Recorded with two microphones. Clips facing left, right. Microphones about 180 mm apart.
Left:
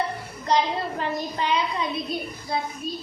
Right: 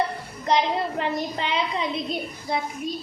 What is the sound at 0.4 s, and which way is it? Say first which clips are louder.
A child's voice: right 1 dB; 20° right (ahead or behind).